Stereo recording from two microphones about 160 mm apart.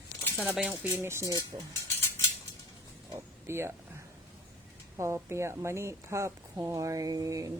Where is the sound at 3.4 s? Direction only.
15° right (ahead or behind).